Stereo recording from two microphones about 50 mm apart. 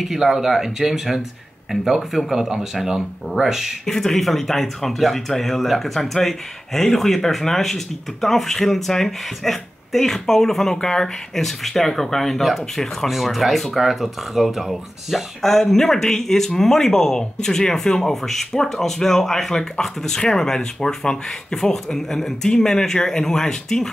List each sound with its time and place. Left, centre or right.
0.0 s speech: centre
3.8 s speech: centre